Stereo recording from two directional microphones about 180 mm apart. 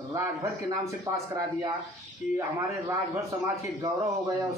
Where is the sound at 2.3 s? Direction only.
15° right (ahead or behind).